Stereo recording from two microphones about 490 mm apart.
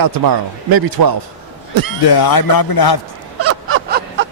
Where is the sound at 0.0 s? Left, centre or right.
Right.